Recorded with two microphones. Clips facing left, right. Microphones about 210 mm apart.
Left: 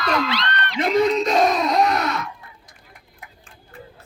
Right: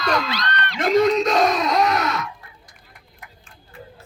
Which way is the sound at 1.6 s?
45° right (ahead or behind).